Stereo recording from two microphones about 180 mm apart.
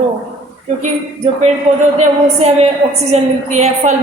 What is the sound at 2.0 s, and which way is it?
A woman's voice, 35° right (ahead or behind).